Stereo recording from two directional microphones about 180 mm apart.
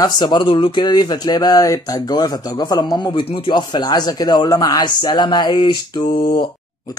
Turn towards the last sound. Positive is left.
turn(degrees=25)  # may be behind; listen again after turning